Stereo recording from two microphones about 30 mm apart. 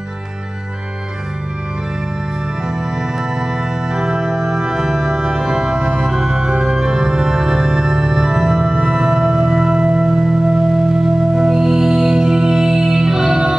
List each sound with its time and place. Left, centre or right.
3.0 s music: centre
6.6 s organ: right
8.8 s music: right